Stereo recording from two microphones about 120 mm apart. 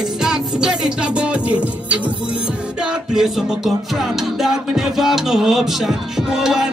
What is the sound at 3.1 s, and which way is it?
Music, 5° right (ahead or behind).